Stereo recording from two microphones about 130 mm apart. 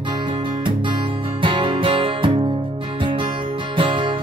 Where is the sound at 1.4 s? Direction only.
40° right (ahead or behind).